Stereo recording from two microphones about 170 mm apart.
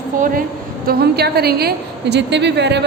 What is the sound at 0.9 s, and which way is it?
A woman's voice, 65° right (ahead or behind).